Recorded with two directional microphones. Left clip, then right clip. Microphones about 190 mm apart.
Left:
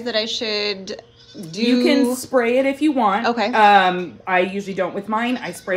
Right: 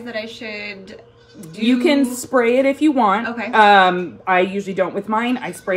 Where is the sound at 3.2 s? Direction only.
15° left (ahead or behind).